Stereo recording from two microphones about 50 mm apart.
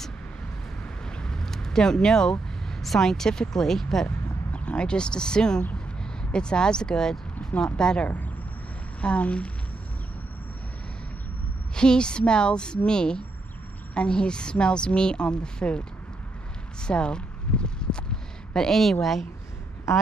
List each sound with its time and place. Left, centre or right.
1.0 s vehicle: centre
1.4 s a sound: centre
2.7 s a woman's voice: centre
4.5 s a woman's voice: left
11.7 s a woman's voice: centre
16.8 s speech: centre
17.6 s a sound: centre